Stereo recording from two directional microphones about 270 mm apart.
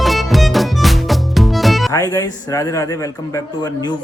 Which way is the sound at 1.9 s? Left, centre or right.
Centre.